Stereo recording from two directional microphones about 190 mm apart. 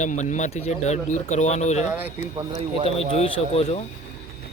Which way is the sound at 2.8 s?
30° left (ahead or behind).